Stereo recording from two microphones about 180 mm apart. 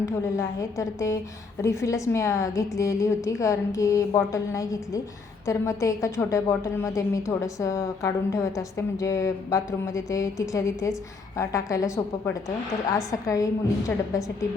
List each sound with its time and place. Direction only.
0.0 s a woman's voice: 20° left (ahead or behind)